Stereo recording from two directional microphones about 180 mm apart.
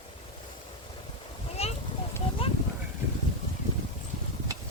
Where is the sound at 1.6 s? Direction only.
35° left (ahead or behind).